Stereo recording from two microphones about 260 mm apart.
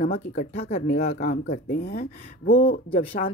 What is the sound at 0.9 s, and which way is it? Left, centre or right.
A woman's voice, left.